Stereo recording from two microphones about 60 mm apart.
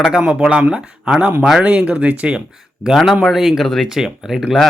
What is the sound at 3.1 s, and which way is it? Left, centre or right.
Speech, centre.